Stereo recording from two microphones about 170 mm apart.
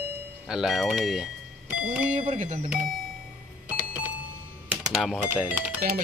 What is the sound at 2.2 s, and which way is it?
Speech, 35° right (ahead or behind).